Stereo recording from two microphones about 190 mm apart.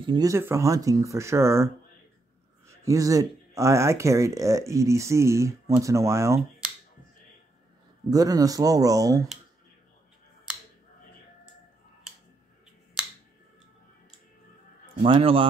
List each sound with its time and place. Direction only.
0.0 s speech: 20° right (ahead or behind)
8.1 s speech: 20° right (ahead or behind)
15.0 s speech: 30° right (ahead or behind)